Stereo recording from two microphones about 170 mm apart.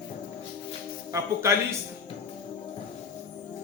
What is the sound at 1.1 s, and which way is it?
Speech, 15° right (ahead or behind).